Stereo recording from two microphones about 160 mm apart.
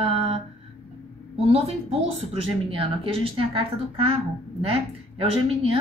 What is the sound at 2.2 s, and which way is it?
A woman's voice, 35° right (ahead or behind).